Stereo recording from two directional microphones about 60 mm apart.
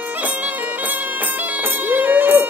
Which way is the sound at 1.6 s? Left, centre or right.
Right.